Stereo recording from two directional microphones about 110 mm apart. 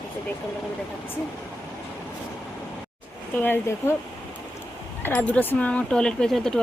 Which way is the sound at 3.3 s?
20° left (ahead or behind).